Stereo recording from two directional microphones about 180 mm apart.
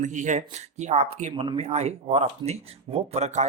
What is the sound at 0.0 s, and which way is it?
Speech, 45° right (ahead or behind).